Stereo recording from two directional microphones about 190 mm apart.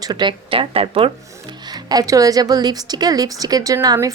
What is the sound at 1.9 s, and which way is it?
A woman's voice, 20° right (ahead or behind).